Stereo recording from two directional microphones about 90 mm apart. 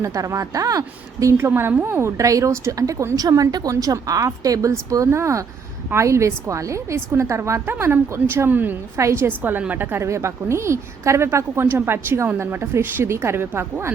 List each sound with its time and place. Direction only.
0.0 s a woman's voice: 35° right (ahead or behind)
3.2 s a woman's voice: 45° right (ahead or behind); by 8.7 s 20° right (ahead or behind)
9.0 s a woman's voice: 30° right (ahead or behind)
10.0 s a woman's voice: 35° right (ahead or behind)